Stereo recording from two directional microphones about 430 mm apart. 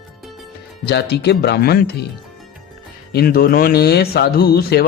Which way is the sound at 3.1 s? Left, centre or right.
Left.